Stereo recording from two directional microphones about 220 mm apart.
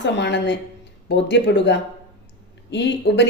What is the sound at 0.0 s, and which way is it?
Speech, 55° left (ahead or behind).